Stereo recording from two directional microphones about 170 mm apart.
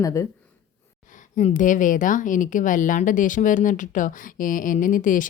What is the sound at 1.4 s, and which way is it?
A woman's voice, 45° left (ahead or behind).